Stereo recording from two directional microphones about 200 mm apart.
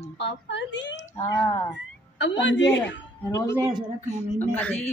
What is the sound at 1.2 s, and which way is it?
Speech, 15° left (ahead or behind).